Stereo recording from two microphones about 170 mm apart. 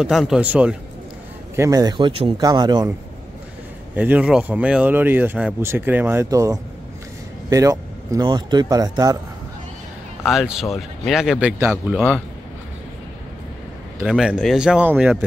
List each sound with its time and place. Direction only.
0.0 s speech: centre (ahead or behind)
1.6 s speech: 20° right (ahead or behind)
3.9 s speech: 10° right (ahead or behind)
10.2 s speech: centre (ahead or behind)
14.0 s speech: 5° right (ahead or behind)